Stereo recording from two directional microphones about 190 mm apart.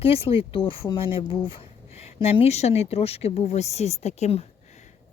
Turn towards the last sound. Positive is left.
turn(degrees=35)  # may be behind; listen again after turning